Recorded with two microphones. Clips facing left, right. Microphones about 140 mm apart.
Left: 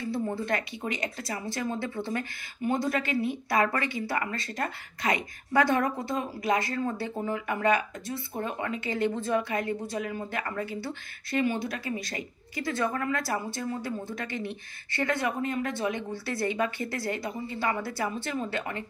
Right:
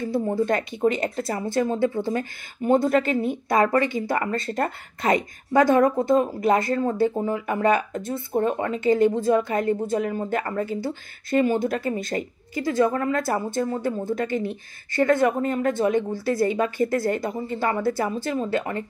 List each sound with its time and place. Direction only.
0.0 s a woman's voice: 45° right (ahead or behind)
6.7 s speech: 40° right (ahead or behind)
12.7 s speech: 30° right (ahead or behind)
13.5 s a woman's voice: 45° right (ahead or behind)